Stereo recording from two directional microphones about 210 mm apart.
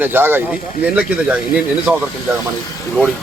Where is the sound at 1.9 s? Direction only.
5° right (ahead or behind).